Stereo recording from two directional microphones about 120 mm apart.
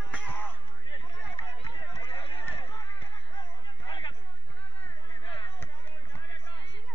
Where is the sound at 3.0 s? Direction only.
40° left (ahead or behind).